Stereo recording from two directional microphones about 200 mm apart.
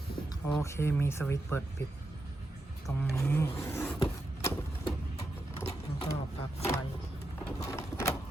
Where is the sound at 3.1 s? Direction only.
10° left (ahead or behind).